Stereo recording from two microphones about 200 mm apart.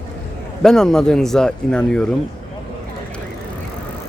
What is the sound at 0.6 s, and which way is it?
Speech, 5° left (ahead or behind).